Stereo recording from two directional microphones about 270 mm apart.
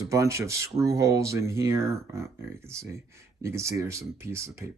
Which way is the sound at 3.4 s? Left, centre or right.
Centre.